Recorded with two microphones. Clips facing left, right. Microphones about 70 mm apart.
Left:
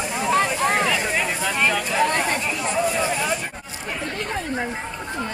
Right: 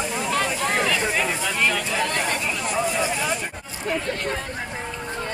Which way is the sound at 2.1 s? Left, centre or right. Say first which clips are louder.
Left 2 dB; centre.